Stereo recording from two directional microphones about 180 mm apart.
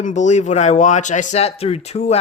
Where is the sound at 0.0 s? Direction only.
40° left (ahead or behind).